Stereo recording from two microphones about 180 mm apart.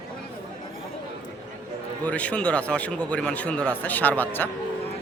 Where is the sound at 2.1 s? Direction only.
5° left (ahead or behind).